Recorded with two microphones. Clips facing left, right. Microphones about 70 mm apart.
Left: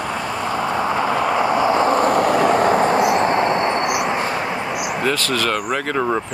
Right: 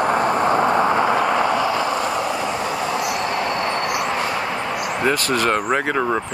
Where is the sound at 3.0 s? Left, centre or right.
Left; by 4.9 s centre.